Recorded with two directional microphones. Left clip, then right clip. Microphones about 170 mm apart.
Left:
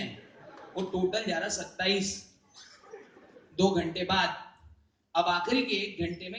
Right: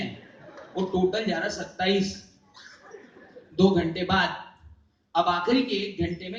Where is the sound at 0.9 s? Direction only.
30° left (ahead or behind).